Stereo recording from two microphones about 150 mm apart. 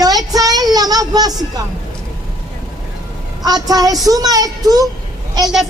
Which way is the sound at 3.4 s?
25° right (ahead or behind).